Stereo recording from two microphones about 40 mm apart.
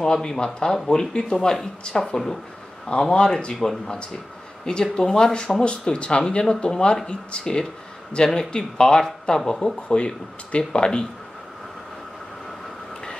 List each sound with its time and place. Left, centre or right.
0.0 s speech: centre